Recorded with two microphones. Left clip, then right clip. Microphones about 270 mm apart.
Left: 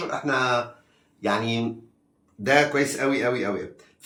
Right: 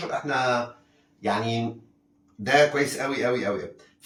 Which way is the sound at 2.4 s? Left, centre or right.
Centre.